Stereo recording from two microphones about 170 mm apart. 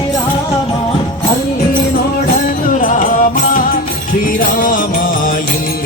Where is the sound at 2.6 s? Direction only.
55° left (ahead or behind).